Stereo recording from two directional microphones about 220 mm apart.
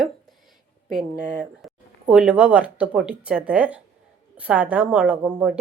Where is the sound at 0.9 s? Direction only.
Centre (ahead or behind).